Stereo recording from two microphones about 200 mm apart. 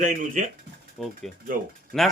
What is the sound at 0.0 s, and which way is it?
Speech, 40° right (ahead or behind).